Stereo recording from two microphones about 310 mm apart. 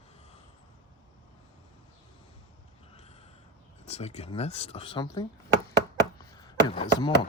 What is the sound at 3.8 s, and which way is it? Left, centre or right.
Speech, left.